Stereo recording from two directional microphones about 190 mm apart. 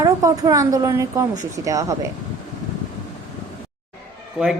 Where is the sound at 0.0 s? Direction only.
15° right (ahead or behind).